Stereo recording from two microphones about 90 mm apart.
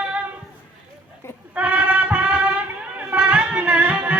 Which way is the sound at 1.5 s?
15° right (ahead or behind).